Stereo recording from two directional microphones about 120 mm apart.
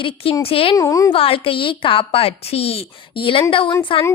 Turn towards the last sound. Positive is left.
turn(degrees=45)  # may be behind; listen again after turning